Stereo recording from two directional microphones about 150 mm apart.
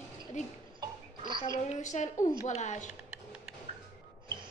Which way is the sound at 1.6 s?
50° left (ahead or behind).